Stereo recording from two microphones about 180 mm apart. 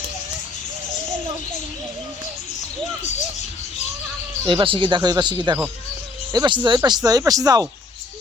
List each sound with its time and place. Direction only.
4.4 s speech: 30° right (ahead or behind)